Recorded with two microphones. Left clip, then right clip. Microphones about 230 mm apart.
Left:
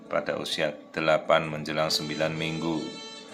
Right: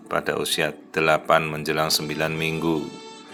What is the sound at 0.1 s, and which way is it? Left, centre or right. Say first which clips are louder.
Speech: right 4 dB; centre.